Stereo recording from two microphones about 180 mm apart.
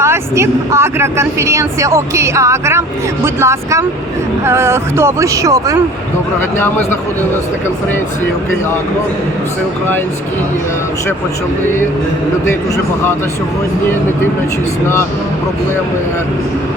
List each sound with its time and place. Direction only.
0.0 s speech: 15° right (ahead or behind)
6.6 s speech: 10° left (ahead or behind)
12.5 s speech: 15° left (ahead or behind)